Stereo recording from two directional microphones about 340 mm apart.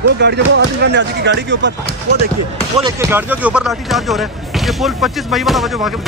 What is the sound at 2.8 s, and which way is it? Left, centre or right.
Speech, centre.